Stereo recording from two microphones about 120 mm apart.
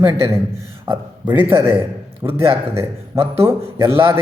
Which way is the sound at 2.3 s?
50° right (ahead or behind).